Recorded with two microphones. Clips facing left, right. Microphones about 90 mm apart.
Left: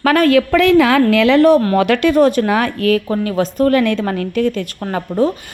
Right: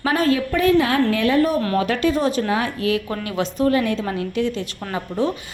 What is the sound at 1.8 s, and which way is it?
A woman's voice, 70° left (ahead or behind).